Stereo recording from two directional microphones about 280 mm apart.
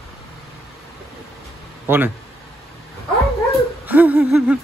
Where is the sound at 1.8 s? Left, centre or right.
Centre.